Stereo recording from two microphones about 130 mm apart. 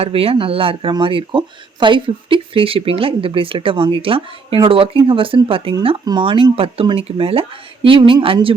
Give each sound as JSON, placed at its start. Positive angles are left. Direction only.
{"t": 0.0, "sound": "speech", "side_deg": -50}